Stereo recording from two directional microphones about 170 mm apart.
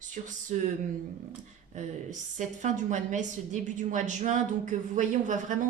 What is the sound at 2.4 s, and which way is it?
A woman's voice, 45° right (ahead or behind).